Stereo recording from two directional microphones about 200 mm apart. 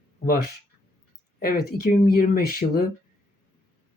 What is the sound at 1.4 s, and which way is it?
Speech, 50° left (ahead or behind).